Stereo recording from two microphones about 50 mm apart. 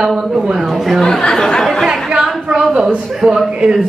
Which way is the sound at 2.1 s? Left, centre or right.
Centre.